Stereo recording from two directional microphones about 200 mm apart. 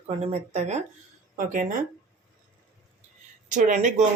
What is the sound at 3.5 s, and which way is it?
Speech, 35° right (ahead or behind).